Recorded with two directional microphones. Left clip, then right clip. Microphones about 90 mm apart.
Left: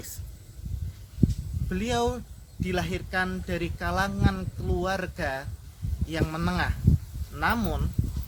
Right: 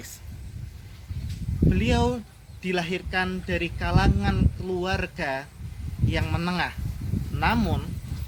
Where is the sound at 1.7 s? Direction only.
45° left (ahead or behind).